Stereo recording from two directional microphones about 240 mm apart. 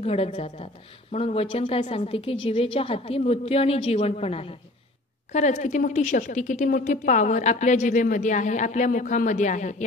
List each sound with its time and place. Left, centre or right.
0.0 s a woman's voice: left